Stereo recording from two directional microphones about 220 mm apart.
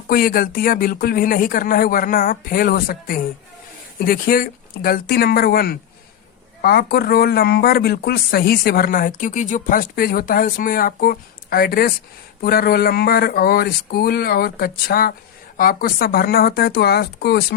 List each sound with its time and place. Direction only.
0.1 s speech: 40° left (ahead or behind)